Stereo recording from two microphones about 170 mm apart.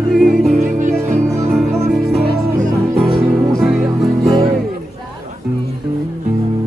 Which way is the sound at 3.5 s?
Centre (ahead or behind).